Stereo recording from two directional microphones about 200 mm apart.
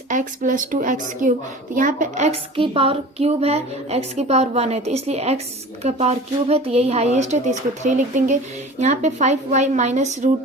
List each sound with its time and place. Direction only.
0.1 s a woman's voice: 40° right (ahead or behind)